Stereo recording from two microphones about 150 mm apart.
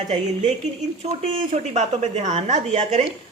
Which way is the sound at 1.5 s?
50° right (ahead or behind).